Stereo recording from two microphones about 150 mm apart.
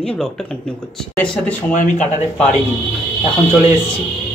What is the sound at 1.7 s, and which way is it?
Speech, 55° left (ahead or behind).